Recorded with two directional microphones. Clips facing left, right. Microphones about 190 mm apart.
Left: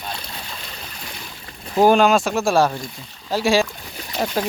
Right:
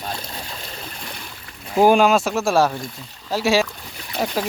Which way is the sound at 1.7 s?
10° right (ahead or behind).